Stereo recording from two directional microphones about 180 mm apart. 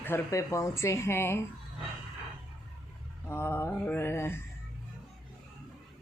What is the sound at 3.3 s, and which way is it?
Mantra, 15° left (ahead or behind).